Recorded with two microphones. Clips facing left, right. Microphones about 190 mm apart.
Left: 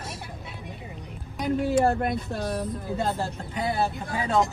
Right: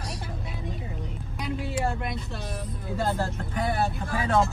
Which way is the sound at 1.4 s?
55° left (ahead or behind).